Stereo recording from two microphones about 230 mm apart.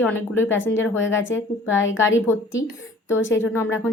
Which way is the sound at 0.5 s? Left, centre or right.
Left.